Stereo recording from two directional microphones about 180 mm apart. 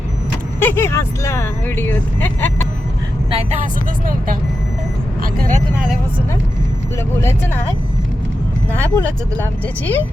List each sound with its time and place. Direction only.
0.6 s speech: 10° left (ahead or behind)
3.2 s speech: 35° right (ahead or behind)
8.7 s speech: 10° left (ahead or behind)